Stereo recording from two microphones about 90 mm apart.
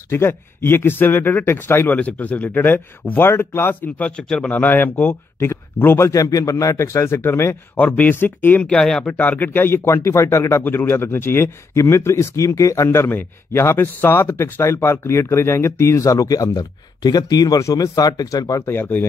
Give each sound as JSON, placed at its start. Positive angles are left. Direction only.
{"t": 0.1, "sound": "speech", "side_deg": 25}
{"t": 4.2, "sound": "speech", "side_deg": 10}
{"t": 8.7, "sound": "speech", "side_deg": 5}
{"t": 10.6, "sound": "speech", "side_deg": 25}
{"t": 18.8, "sound": "speech", "side_deg": 25}